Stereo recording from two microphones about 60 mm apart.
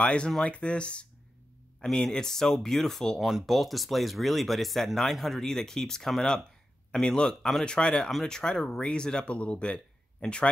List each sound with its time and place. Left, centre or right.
0.0 s speech: centre
3.2 s speech: centre